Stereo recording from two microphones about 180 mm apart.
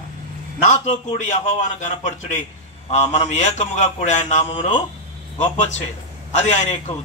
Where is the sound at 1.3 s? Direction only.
40° left (ahead or behind).